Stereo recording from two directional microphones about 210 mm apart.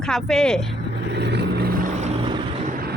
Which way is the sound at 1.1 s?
55° right (ahead or behind).